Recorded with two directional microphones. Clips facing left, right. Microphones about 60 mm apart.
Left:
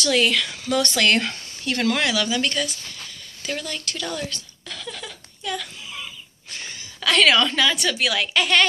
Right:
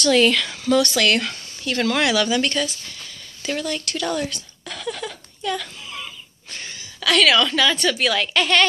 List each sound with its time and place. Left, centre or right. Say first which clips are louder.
0.0 s speech: right 4 dB; centre
0.9 s speech: even; left
1.7 s a woman's voice: right 1 dB; centre
2.0 s speech: right 3 dB; centre
2.4 s speech: right 2 dB; centre
3.4 s a sound: right 4 dB; centre
7.0 s a woman's voice: right 1 dB; left
7.6 s a woman's voice: right 2 dB; centre